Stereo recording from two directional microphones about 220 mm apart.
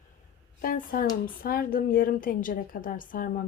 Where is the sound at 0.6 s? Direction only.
40° left (ahead or behind).